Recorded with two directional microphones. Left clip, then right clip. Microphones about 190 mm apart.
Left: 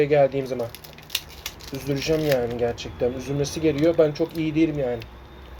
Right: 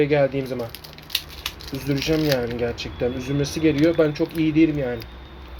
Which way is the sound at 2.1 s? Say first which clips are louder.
Left 1 dB; 20° left (ahead or behind).